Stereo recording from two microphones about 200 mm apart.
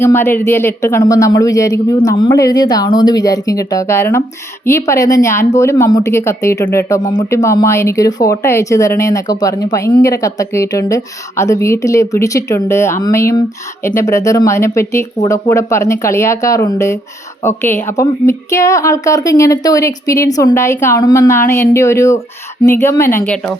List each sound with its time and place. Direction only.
0.0 s speech: 10° left (ahead or behind)